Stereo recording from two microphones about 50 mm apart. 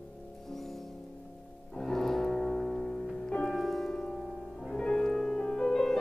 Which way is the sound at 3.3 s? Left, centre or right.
Centre.